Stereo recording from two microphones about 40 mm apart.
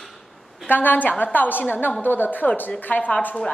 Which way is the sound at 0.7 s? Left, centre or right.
Left.